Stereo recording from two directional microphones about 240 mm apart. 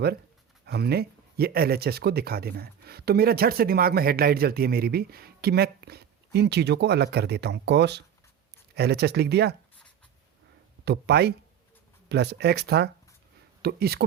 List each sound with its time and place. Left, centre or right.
0.6 s speech: right
10.8 s speech: right